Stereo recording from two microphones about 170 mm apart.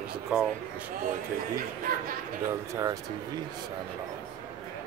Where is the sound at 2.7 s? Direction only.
20° right (ahead or behind).